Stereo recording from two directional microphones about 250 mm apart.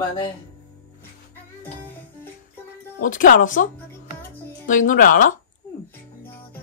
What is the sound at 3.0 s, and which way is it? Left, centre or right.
Speech, left.